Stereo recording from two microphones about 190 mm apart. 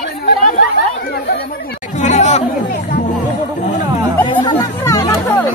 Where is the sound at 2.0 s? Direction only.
40° left (ahead or behind).